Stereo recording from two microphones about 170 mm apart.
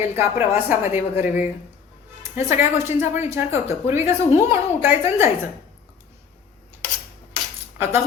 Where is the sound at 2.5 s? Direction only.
15° right (ahead or behind).